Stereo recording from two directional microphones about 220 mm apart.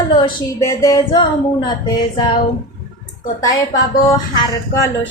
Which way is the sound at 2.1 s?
20° left (ahead or behind).